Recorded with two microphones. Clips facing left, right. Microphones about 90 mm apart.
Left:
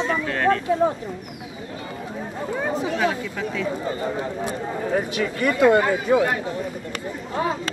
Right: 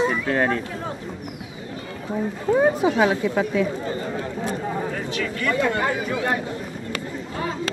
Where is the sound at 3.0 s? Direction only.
20° right (ahead or behind).